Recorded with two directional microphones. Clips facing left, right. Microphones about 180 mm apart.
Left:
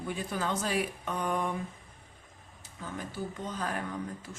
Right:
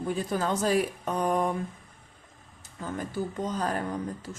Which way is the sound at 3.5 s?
40° right (ahead or behind).